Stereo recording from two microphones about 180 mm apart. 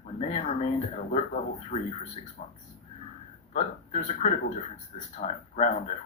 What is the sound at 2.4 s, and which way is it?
Speech, 40° left (ahead or behind).